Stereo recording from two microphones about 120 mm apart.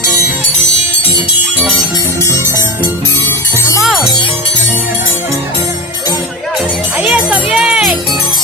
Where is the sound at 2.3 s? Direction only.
25° right (ahead or behind).